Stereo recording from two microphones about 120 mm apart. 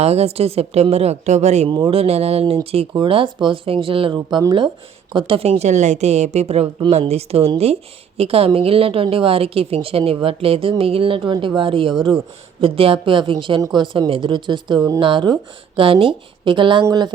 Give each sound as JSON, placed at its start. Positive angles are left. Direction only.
{"t": 0.0, "sound": "a woman's voice", "side_deg": -60}
{"t": 1.6, "sound": "a woman's voice", "side_deg": -45}
{"t": 5.1, "sound": "a woman's voice", "side_deg": -50}